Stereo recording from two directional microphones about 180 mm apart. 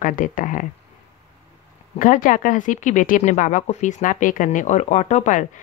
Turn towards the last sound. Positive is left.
turn(degrees=40)  # may be behind; listen again after turning